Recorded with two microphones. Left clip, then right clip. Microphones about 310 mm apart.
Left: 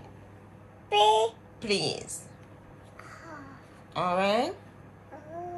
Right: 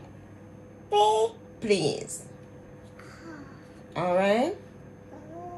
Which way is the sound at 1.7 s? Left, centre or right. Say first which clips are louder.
Right 4 dB; left.